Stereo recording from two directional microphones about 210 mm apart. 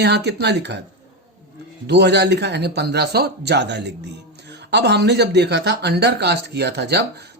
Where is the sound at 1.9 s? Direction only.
55° right (ahead or behind).